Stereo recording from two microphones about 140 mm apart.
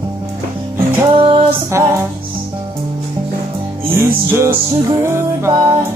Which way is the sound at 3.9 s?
15° right (ahead or behind).